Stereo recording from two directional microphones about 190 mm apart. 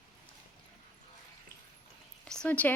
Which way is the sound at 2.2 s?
5° left (ahead or behind).